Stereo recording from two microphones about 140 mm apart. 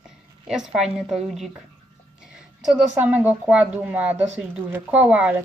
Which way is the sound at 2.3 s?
5° right (ahead or behind).